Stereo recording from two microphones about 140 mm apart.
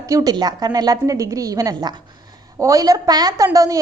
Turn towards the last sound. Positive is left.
turn(degrees=-25)  # may be behind; listen again after turning